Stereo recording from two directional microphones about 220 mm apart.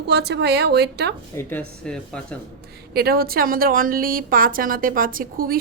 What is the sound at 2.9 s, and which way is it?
A woman's voice, 45° right (ahead or behind).